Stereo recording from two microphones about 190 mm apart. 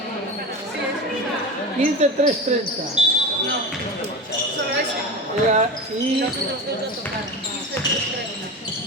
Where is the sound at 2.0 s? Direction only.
35° right (ahead or behind).